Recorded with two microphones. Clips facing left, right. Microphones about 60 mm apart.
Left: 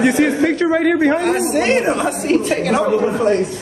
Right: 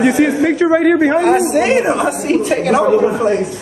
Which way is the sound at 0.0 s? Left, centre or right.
Centre.